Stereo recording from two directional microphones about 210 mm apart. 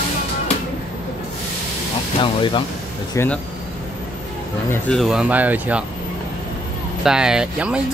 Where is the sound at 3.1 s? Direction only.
5° left (ahead or behind).